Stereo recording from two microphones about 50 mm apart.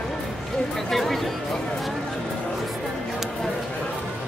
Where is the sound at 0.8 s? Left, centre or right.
Centre.